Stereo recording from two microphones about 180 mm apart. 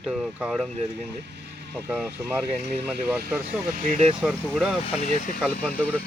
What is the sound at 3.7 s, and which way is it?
Speech, 40° right (ahead or behind).